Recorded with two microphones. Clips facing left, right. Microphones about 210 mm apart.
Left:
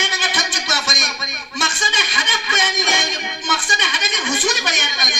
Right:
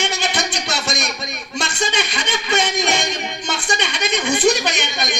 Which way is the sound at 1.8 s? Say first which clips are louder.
Right 4 dB; 65° right (ahead or behind).